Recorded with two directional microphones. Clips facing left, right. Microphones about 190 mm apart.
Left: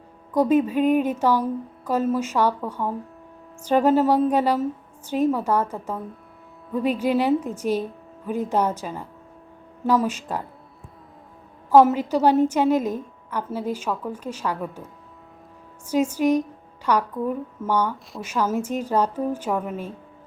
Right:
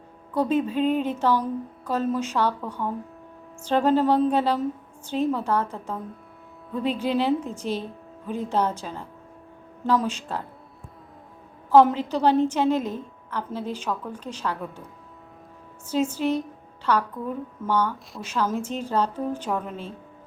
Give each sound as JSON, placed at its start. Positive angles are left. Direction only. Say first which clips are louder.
{"t": 0.3, "sound": "a woman's voice", "louder": "left 4 dB", "side_deg": 10}
{"t": 6.7, "sound": "a woman's voice", "louder": "left 3 dB", "side_deg": 10}
{"t": 11.7, "sound": "a woman's voice", "louder": "left 2 dB", "side_deg": 10}
{"t": 15.9, "sound": "a woman's voice", "louder": "left 4 dB", "side_deg": 10}